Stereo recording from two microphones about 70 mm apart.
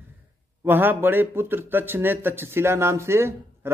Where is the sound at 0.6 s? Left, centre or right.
Right.